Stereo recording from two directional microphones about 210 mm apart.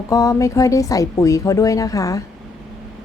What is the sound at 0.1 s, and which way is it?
A woman's voice, 15° left (ahead or behind).